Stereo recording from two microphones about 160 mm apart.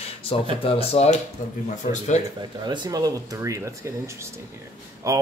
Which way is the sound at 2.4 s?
25° right (ahead or behind).